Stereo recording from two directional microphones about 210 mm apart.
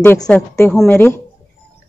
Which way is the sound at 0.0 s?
10° left (ahead or behind).